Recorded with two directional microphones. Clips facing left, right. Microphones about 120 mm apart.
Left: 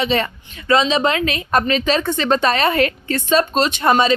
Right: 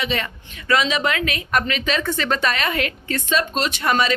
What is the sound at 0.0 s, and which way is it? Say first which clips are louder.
A woman's voice: left 6 dB; 30° left (ahead or behind).